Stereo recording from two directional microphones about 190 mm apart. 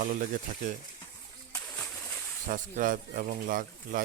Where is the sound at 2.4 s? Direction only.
45° right (ahead or behind).